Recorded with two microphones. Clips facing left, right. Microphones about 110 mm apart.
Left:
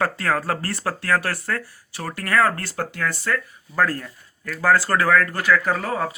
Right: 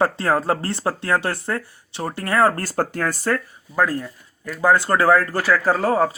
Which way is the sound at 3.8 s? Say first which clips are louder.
Right 1 dB; 15° right (ahead or behind).